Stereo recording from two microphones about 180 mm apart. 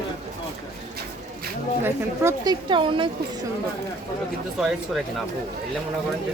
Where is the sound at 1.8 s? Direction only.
15° right (ahead or behind).